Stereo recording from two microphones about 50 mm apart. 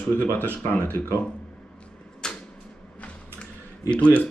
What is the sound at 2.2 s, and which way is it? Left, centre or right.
Typewriter, centre.